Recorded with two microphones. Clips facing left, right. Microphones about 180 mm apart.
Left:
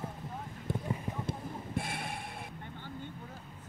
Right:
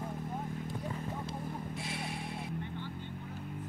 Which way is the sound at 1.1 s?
20° left (ahead or behind).